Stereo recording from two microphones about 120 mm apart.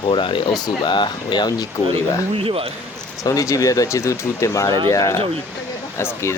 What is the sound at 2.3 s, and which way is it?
Speech, 50° right (ahead or behind).